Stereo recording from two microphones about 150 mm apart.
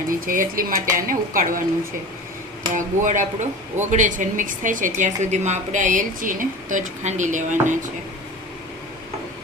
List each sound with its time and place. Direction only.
0.1 s speech: 65° right (ahead or behind)
2.7 s speech: 60° right (ahead or behind)